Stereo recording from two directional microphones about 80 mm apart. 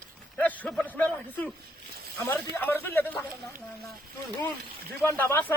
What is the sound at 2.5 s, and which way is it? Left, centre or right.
Speech, left.